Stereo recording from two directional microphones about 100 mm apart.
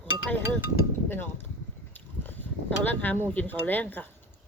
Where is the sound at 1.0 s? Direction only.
20° left (ahead or behind).